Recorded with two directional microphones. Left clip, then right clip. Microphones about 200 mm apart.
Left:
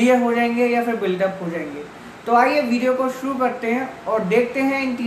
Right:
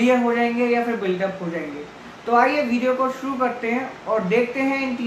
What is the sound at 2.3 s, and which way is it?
Speech, 5° left (ahead or behind).